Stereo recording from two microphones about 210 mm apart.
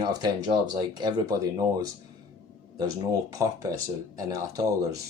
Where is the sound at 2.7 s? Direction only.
15° right (ahead or behind).